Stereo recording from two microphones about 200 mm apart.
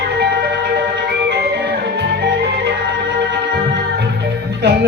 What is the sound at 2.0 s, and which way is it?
Music, 55° right (ahead or behind).